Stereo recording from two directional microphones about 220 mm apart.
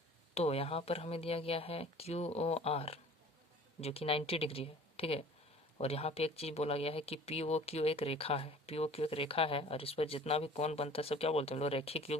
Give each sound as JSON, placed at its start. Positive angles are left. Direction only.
{"t": 0.3, "sound": "speech", "side_deg": 25}